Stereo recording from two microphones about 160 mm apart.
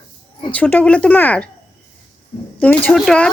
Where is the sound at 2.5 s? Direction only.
10° left (ahead or behind).